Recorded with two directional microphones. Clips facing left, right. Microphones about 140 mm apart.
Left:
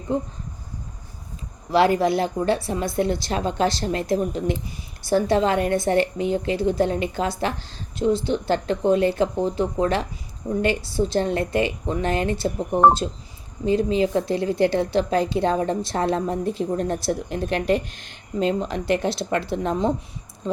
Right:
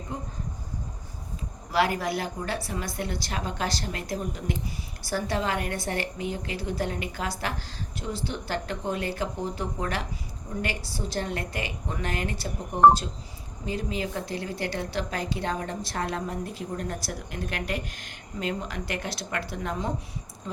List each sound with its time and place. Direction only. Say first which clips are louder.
1.7 s a woman's voice: left 8 dB; 25° left (ahead or behind)
13.7 s a woman's voice: left 11 dB; 25° left (ahead or behind)